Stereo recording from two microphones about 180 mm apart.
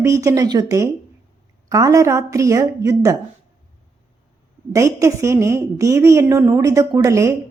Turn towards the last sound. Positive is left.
turn(degrees=-15)  # may be behind; listen again after turning